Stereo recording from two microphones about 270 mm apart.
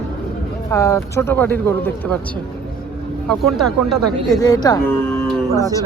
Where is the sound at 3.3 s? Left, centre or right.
Centre.